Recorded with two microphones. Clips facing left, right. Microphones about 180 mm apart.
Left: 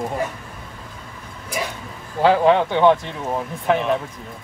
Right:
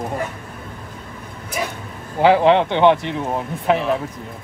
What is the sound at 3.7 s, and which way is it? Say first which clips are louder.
Speech: right 1 dB; centre (ahead or behind).